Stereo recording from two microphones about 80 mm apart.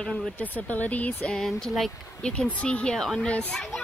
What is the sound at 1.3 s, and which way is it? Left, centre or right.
Speech, centre.